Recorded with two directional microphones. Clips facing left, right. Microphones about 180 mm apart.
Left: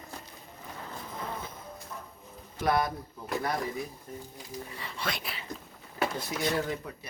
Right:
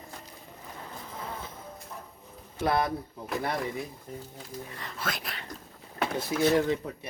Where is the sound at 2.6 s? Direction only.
25° right (ahead or behind).